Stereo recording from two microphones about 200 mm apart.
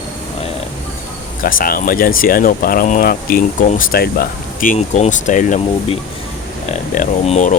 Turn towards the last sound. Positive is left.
turn(degrees=35)  # may be behind; listen again after turning